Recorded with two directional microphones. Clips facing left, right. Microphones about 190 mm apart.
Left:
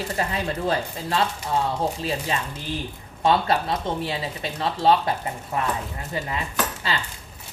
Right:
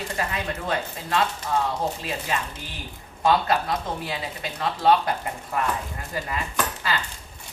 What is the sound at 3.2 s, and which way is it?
Speech, 30° left (ahead or behind).